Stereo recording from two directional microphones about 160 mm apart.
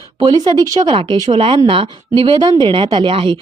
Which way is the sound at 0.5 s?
20° right (ahead or behind).